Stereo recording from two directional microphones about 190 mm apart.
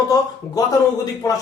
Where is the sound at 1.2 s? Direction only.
20° left (ahead or behind).